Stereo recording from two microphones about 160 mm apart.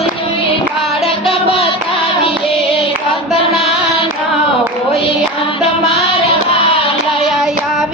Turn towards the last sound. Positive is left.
turn(degrees=0)  # may be behind; listen again after turning